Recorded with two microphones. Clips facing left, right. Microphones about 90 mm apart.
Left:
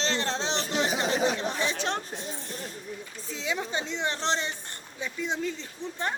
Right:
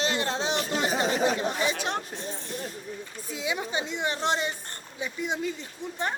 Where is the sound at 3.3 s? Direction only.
10° right (ahead or behind).